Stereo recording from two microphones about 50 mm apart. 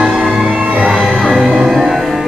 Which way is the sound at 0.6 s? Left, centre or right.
Right.